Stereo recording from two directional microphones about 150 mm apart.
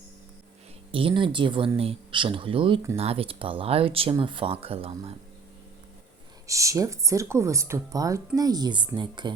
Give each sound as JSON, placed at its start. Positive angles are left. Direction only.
{"t": 0.9, "sound": "speech", "side_deg": -35}
{"t": 6.5, "sound": "speech", "side_deg": -20}